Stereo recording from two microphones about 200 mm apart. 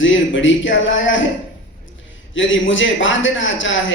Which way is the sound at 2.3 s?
70° left (ahead or behind).